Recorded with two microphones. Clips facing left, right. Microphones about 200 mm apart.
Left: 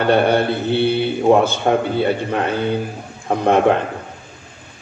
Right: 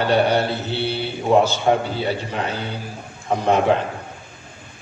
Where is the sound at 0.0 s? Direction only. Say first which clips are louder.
Left 3 dB; 55° left (ahead or behind).